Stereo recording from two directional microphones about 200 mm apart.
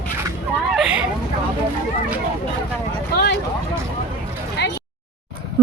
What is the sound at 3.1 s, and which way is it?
Speech, 55° left (ahead or behind).